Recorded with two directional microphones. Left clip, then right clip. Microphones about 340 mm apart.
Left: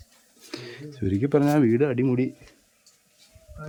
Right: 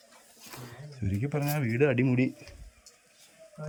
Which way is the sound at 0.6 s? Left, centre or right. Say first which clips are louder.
Left 10 dB; left.